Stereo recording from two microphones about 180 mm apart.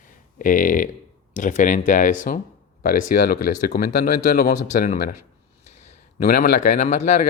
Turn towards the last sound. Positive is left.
turn(degrees=40)  # may be behind; listen again after turning